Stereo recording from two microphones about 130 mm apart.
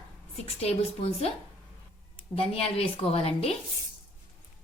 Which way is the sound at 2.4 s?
45° left (ahead or behind).